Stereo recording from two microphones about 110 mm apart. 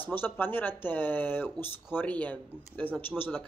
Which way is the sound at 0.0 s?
20° left (ahead or behind).